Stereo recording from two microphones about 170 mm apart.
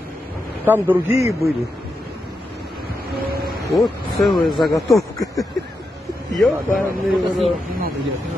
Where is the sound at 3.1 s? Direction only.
65° right (ahead or behind).